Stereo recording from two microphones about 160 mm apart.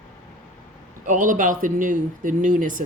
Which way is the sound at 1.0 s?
55° right (ahead or behind).